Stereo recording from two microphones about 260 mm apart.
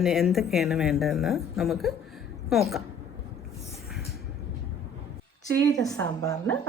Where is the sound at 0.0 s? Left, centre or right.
Centre.